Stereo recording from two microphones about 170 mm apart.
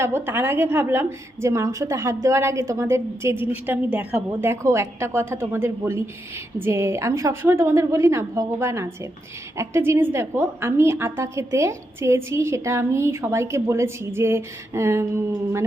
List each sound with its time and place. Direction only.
0.0 s a woman's voice: 15° right (ahead or behind)